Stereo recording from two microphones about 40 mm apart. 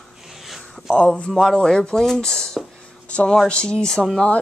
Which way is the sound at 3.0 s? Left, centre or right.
Left.